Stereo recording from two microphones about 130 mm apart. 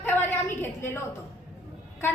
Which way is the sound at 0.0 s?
15° left (ahead or behind).